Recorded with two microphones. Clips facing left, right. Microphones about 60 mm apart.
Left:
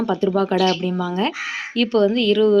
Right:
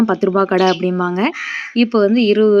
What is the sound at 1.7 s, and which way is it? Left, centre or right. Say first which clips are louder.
Speech: right 5 dB; right.